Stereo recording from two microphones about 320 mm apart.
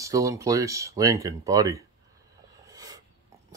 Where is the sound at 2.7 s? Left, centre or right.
Centre.